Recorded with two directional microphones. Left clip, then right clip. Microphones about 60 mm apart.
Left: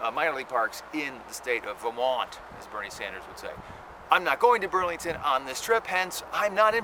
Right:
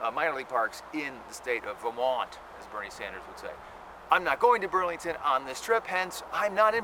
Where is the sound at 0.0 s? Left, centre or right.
Centre.